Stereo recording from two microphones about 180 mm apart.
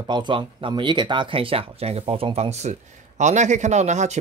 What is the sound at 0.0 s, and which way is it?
Speech, 25° right (ahead or behind).